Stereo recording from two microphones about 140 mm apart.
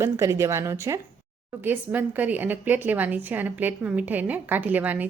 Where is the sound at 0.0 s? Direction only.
20° right (ahead or behind).